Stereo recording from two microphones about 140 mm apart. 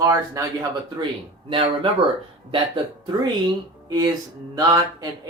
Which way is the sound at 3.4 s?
25° right (ahead or behind).